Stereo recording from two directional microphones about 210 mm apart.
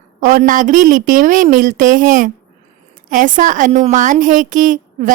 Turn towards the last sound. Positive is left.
turn(degrees=-40)  # may be behind; listen again after turning